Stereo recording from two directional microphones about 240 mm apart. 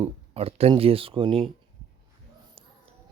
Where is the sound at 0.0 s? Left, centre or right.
Right.